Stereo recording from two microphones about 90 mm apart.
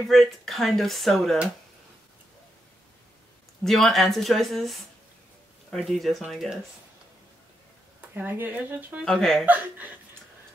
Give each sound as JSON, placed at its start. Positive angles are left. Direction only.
{"t": 0.1, "sound": "speech", "side_deg": 0}
{"t": 3.6, "sound": "speech", "side_deg": 0}
{"t": 8.1, "sound": "speech", "side_deg": -20}
{"t": 9.0, "sound": "speech", "side_deg": 5}
{"t": 9.5, "sound": "speech", "side_deg": -20}